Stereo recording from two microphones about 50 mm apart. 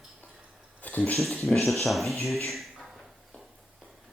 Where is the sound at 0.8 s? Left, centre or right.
Left.